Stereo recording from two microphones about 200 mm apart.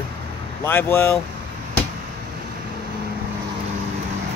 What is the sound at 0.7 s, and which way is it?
Speech, 10° left (ahead or behind).